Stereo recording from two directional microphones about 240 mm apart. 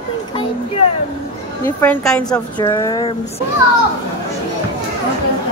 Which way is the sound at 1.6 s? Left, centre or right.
Centre.